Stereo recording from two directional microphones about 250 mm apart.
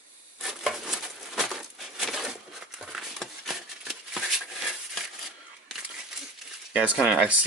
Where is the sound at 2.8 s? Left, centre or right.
Centre.